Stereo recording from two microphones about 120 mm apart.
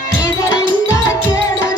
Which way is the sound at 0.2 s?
30° left (ahead or behind).